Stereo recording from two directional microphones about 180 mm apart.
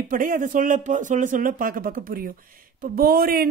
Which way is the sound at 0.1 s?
50° right (ahead or behind).